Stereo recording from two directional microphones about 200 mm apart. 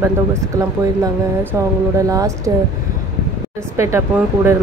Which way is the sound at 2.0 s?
15° right (ahead or behind).